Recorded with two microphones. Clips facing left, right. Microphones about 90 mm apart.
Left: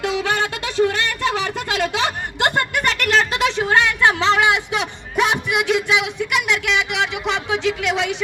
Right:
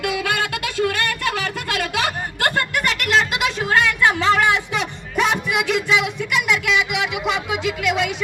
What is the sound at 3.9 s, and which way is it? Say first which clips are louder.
Speech: left 1 dB; 25° left (ahead or behind).